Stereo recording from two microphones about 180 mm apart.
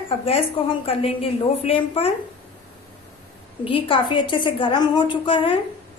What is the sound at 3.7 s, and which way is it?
A woman's voice, 30° left (ahead or behind).